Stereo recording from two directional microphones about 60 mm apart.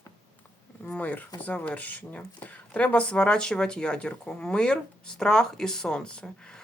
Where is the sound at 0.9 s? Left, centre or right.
Left.